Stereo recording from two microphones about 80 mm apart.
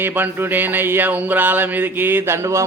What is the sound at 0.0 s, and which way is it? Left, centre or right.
A man's voice, right.